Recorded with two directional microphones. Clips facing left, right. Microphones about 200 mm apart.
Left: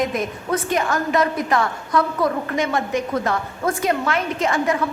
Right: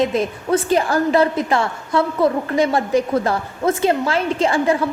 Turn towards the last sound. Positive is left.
turn(degrees=-30)  # may be behind; listen again after turning